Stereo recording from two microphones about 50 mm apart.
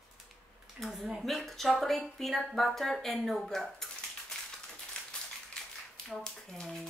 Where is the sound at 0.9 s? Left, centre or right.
Centre.